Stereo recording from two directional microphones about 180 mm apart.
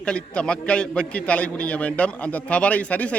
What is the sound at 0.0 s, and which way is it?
A man's voice, 5° left (ahead or behind).